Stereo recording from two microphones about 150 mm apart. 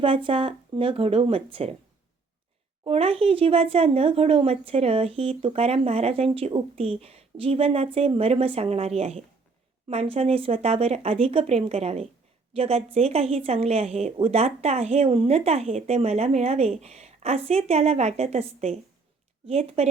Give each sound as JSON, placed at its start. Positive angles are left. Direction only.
{"t": 0.0, "sound": "speech", "side_deg": -35}
{"t": 2.8, "sound": "speech", "side_deg": -40}